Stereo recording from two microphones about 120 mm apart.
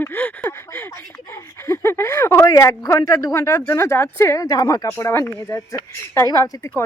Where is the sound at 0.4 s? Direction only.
20° left (ahead or behind).